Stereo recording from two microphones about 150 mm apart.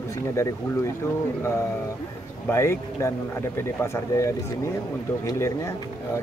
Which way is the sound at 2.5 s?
15° left (ahead or behind).